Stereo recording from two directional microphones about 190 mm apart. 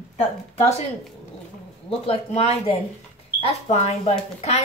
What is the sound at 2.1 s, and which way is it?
Speech, 30° left (ahead or behind).